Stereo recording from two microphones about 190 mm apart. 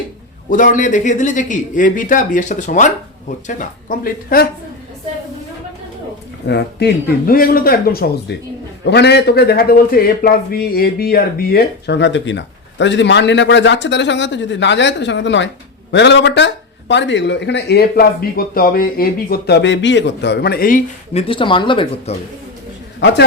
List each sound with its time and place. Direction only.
0.5 s speech: 45° left (ahead or behind)
6.5 s a man's voice: 60° left (ahead or behind); by 22.1 s 25° left (ahead or behind)
23.0 s a man's voice: 65° left (ahead or behind)